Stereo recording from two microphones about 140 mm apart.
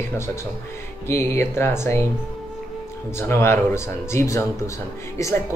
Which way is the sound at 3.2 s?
20° left (ahead or behind).